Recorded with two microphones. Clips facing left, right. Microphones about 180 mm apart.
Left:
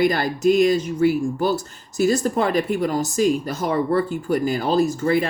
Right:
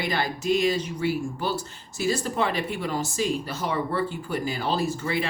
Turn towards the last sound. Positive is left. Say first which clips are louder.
# left 8 dB
turn(degrees=45)  # may be behind; listen again after turning